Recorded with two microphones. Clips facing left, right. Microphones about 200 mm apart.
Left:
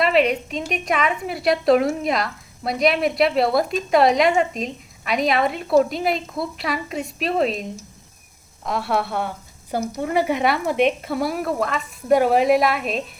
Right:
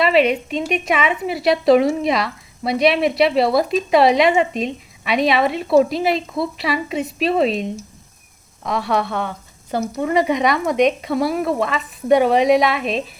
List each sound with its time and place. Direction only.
0.0 s a woman's voice: centre (ahead or behind)
8.6 s a woman's voice: centre (ahead or behind)